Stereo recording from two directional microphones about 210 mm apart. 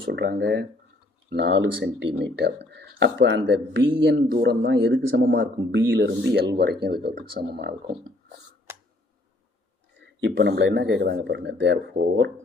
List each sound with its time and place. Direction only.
0.0 s speech: 50° right (ahead or behind)
10.0 s speech: 60° right (ahead or behind)